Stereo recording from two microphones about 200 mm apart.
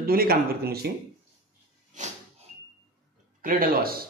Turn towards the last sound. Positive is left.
turn(degrees=-50)  # may be behind; listen again after turning